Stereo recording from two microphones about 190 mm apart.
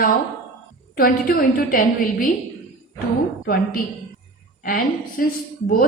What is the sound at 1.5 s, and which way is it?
Speech, 50° left (ahead or behind).